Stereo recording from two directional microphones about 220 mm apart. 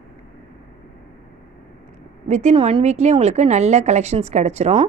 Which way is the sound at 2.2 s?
30° right (ahead or behind).